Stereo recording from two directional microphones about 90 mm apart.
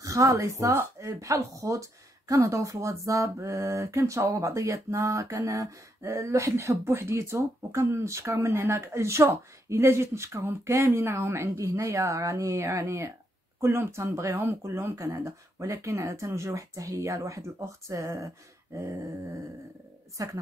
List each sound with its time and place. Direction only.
0.0 s speech: 35° right (ahead or behind)
20.2 s speech: 40° right (ahead or behind)